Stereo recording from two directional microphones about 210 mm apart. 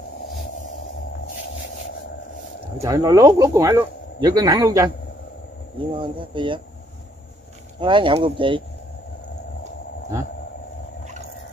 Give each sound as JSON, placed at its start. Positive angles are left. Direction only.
{"t": 2.8, "sound": "speech", "side_deg": -15}
{"t": 5.9, "sound": "speech", "side_deg": -25}
{"t": 7.8, "sound": "speech", "side_deg": -25}